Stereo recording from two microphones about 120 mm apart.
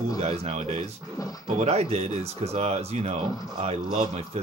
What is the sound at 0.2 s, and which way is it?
Speech, 60° right (ahead or behind).